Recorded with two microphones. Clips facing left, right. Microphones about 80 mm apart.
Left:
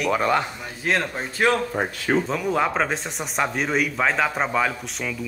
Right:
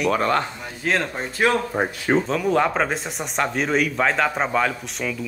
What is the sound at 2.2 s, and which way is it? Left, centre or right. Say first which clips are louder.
Speech: right 3 dB; centre.